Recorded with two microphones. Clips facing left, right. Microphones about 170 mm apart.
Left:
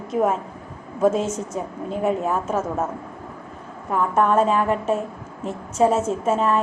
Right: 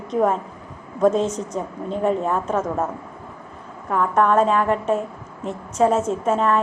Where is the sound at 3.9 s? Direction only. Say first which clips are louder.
Right 1 dB; 5° left (ahead or behind).